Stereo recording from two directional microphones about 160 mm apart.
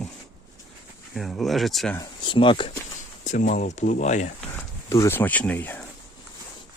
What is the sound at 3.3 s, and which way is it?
Speech, 50° left (ahead or behind).